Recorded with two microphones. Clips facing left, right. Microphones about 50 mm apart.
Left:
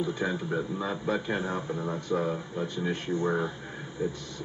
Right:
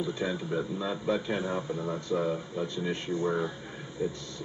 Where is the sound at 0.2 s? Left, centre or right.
Centre.